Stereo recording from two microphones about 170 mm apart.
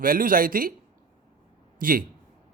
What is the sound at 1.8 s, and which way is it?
Speech, 55° right (ahead or behind).